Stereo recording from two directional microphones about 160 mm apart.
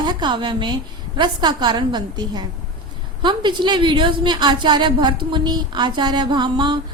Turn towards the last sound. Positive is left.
turn(degrees=-30)  # may be behind; listen again after turning